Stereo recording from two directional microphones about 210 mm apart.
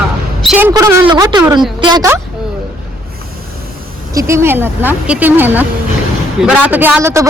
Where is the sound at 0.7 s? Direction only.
15° right (ahead or behind).